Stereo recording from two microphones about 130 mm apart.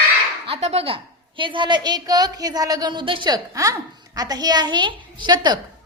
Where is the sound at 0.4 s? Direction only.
50° right (ahead or behind).